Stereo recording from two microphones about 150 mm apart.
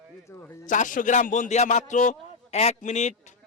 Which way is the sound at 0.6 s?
60° left (ahead or behind).